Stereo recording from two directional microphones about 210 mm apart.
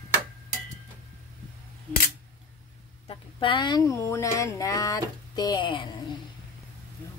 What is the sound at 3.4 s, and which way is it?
Speech, 20° left (ahead or behind).